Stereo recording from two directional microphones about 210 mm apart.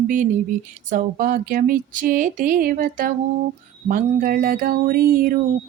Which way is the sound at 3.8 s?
40° right (ahead or behind).